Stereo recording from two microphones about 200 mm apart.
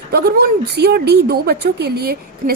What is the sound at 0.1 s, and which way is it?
Speech, 50° right (ahead or behind).